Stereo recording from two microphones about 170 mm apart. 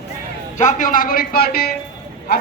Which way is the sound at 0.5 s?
45° left (ahead or behind).